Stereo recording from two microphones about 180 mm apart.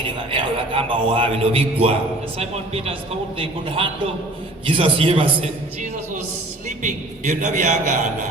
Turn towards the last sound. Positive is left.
turn(degrees=-40)  # may be behind; listen again after turning